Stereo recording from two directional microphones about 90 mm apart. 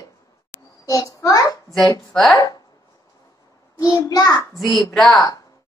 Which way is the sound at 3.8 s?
40° left (ahead or behind).